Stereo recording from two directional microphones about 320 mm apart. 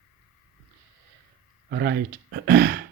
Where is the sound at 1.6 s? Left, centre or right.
Right.